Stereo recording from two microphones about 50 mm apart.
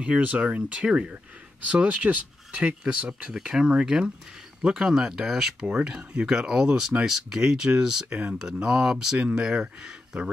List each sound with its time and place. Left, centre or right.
0.0 s speech: right; by 5.7 s centre
5.7 s speech: centre